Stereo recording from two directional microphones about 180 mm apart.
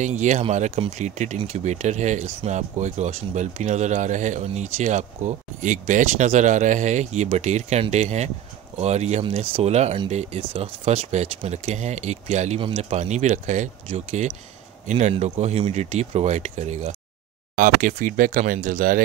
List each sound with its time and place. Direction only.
0.0 s speech: 40° right (ahead or behind)